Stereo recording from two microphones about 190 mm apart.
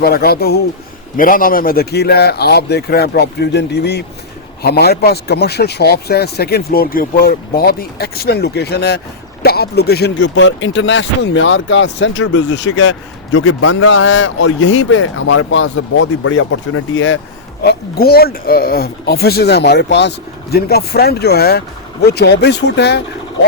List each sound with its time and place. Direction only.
0.0 s speech: 55° left (ahead or behind); by 17.2 s 90° left
17.6 s speech: 55° left (ahead or behind)